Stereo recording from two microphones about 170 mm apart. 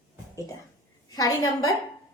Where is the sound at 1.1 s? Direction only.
20° left (ahead or behind).